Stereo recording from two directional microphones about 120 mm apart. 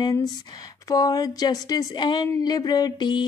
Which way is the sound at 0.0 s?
30° left (ahead or behind).